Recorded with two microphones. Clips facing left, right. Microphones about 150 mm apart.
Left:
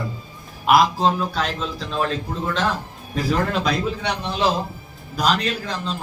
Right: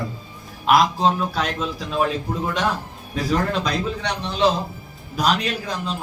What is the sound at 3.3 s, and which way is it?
A man's voice, 5° left (ahead or behind).